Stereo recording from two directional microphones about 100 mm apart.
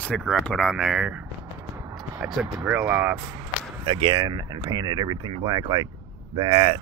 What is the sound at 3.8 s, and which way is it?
Speech, 75° right (ahead or behind).